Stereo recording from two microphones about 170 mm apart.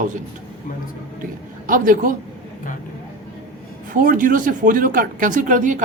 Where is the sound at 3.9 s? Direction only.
55° right (ahead or behind).